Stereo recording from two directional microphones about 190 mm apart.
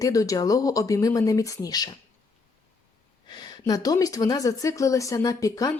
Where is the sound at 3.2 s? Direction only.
25° left (ahead or behind).